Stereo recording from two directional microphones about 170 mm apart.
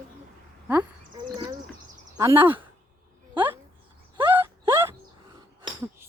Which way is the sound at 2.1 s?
15° right (ahead or behind).